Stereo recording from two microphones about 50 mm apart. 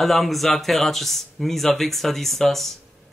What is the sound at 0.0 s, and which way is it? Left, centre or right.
Speech, centre.